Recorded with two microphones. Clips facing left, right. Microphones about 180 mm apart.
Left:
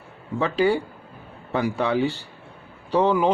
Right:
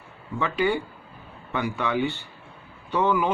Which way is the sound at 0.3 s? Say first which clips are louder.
Left 4 dB; 35° left (ahead or behind).